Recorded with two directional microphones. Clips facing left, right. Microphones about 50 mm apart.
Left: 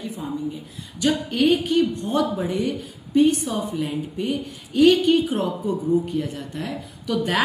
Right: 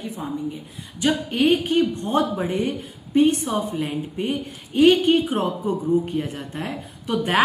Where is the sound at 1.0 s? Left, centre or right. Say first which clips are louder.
Even; right.